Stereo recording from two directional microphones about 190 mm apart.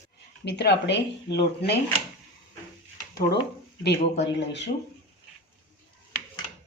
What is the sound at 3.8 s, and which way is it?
Speech, 65° left (ahead or behind).